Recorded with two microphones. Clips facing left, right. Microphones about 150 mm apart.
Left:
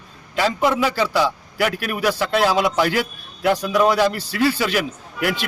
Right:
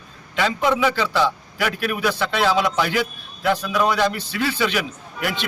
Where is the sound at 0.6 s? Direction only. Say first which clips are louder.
Even; 5° left (ahead or behind).